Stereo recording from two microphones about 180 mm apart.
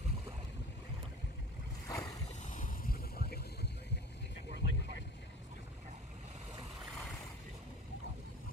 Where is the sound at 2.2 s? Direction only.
45° left (ahead or behind); by 4.0 s 65° left (ahead or behind).